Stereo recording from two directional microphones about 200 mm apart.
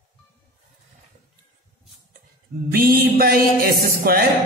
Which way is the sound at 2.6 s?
50° right (ahead or behind).